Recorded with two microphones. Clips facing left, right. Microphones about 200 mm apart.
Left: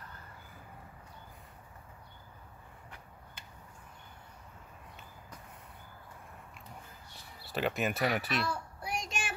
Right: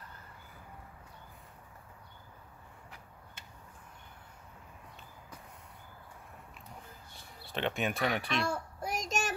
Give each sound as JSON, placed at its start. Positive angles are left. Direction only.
{"t": 7.5, "sound": "speech", "side_deg": 5}
{"t": 8.5, "sound": "child singing", "side_deg": -40}